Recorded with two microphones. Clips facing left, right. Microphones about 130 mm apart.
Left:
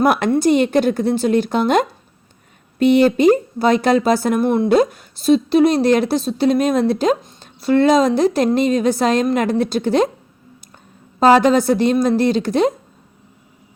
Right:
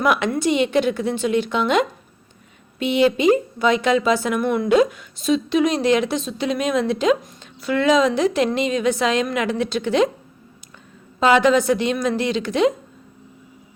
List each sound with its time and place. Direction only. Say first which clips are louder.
0.0 s speech: left 5 dB; 45° left (ahead or behind)
11.2 s speech: left 3 dB; 40° left (ahead or behind)